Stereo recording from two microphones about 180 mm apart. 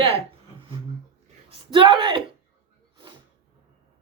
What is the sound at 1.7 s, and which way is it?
Beatboxing, 25° right (ahead or behind).